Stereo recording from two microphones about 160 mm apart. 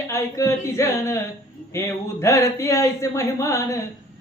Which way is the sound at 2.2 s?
15° left (ahead or behind).